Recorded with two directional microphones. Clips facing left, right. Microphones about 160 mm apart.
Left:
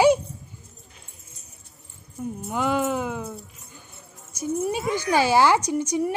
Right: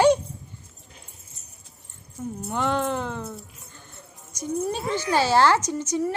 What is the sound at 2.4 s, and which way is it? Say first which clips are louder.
A woman's voice: left 1 dB; 5° left (ahead or behind).